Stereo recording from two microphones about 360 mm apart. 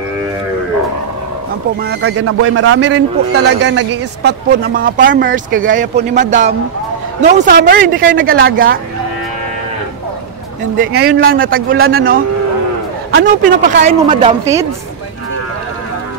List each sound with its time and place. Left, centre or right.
1.8 s a man's voice: right
10.8 s a man's voice: right; by 14.7 s centre